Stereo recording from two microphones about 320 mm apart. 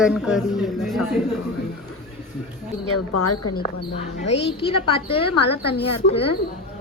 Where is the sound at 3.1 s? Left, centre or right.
Left.